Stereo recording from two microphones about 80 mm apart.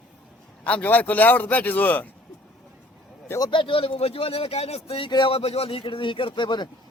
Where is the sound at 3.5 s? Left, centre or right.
Left.